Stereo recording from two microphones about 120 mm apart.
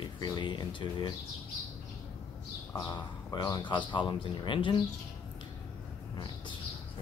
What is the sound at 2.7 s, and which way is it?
Speech, 30° left (ahead or behind).